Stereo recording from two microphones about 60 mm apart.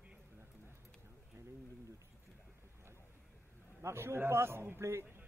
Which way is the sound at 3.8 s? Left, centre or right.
Right.